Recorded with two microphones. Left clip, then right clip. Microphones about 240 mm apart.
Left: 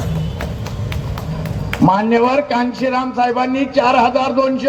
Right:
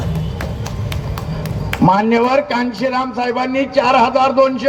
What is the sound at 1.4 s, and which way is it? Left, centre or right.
A man's voice, right.